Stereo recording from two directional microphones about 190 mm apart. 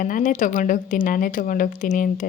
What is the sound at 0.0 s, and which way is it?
Speech, 45° left (ahead or behind).